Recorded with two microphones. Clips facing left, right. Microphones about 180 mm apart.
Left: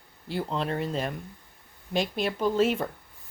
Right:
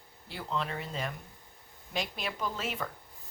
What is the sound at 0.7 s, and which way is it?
Speech, 50° left (ahead or behind).